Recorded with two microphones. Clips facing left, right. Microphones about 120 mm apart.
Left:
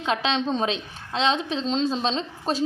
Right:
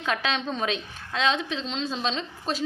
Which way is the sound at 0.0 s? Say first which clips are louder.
Left 3 dB; 25° left (ahead or behind).